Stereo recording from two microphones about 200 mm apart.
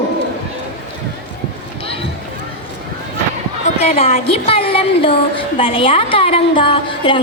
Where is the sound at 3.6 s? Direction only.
35° left (ahead or behind).